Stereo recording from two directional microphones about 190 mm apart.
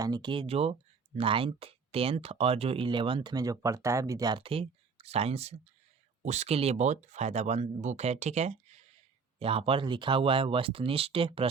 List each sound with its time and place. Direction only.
0.0 s speech: 25° right (ahead or behind)